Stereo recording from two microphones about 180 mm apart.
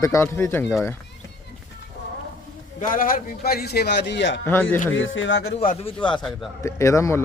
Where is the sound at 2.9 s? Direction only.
50° left (ahead or behind); by 4.3 s 80° left.